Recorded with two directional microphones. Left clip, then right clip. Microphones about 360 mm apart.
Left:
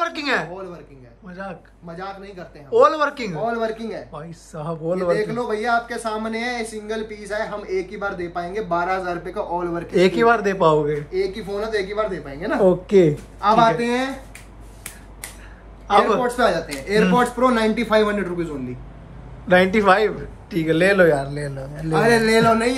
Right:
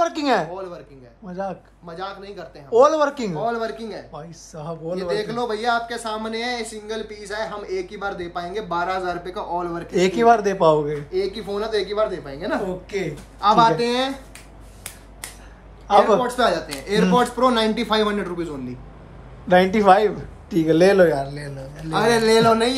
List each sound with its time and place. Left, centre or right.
0.0 s a sound: centre
1.3 s a man's voice: centre
13.5 s speech: centre
15.9 s speech: centre
19.4 s speech: centre